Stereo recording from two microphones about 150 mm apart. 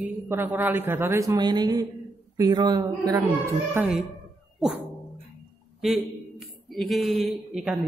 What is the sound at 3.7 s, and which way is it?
Speech, 5° right (ahead or behind).